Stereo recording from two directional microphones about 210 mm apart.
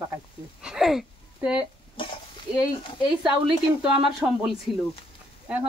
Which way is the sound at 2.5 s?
5° right (ahead or behind).